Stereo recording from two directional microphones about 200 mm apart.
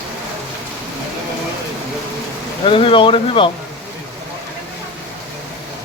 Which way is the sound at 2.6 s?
25° left (ahead or behind).